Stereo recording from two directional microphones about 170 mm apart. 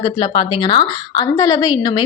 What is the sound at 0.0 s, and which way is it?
Speech, 25° left (ahead or behind).